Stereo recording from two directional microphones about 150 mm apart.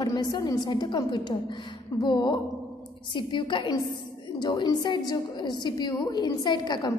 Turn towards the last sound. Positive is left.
turn(degrees=30)  # may be behind; listen again after turning